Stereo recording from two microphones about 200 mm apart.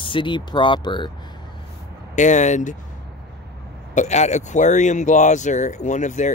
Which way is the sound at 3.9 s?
35° left (ahead or behind).